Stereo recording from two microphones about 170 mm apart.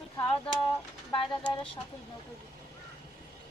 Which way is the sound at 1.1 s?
30° left (ahead or behind).